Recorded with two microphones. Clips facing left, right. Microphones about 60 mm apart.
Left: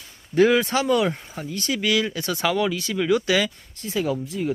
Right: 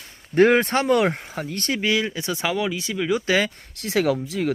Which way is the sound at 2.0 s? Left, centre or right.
Centre.